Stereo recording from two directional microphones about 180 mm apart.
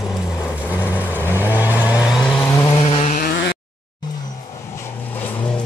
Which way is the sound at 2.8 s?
45° left (ahead or behind).